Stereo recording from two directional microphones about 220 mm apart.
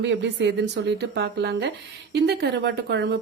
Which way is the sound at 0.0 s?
55° right (ahead or behind).